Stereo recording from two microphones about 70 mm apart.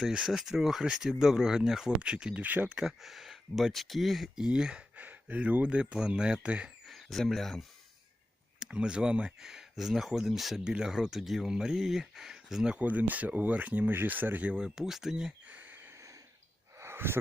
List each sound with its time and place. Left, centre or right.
0.0 s speech: centre; by 2.6 s right
2.6 s speech: centre
5.0 s speech: right
6.8 s speech: centre
8.5 s speech: centre
12.8 s speech: right
14.5 s speech: centre
15.4 s a sound: right